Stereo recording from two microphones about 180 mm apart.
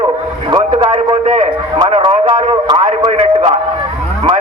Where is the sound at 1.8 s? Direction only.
30° right (ahead or behind).